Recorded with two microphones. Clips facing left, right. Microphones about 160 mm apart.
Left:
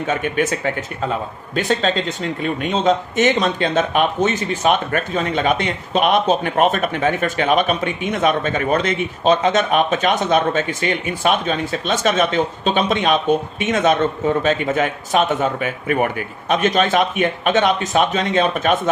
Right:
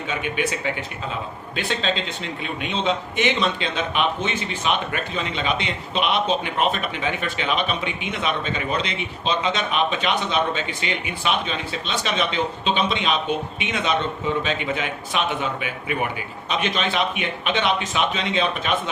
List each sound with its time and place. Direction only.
0.1 s a man's voice: 45° left (ahead or behind)